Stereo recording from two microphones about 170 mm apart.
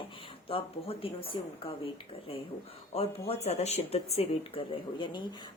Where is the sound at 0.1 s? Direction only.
30° left (ahead or behind).